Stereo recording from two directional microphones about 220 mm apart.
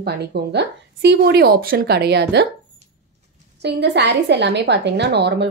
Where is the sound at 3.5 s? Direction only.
50° right (ahead or behind).